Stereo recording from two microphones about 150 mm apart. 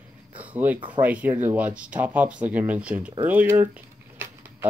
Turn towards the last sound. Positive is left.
turn(degrees=-10)  # may be behind; listen again after turning